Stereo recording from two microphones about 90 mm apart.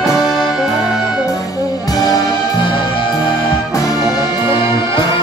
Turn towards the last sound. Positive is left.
turn(degrees=40)  # may be behind; listen again after turning